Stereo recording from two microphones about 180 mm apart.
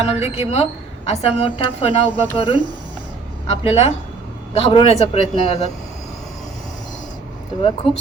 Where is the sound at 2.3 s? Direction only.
25° left (ahead or behind).